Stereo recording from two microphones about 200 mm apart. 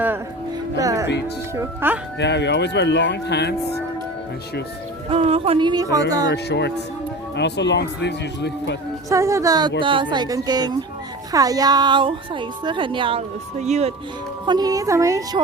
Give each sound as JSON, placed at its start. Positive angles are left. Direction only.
{"t": 0.8, "sound": "music", "side_deg": -15}
{"t": 1.5, "sound": "a woman's voice", "side_deg": -10}
{"t": 2.1, "sound": "speech", "side_deg": 60}
{"t": 5.0, "sound": "a woman's voice", "side_deg": -30}
{"t": 6.3, "sound": "speech", "side_deg": 55}
{"t": 9.0, "sound": "a woman's voice", "side_deg": -15}
{"t": 14.4, "sound": "a woman's voice", "side_deg": -20}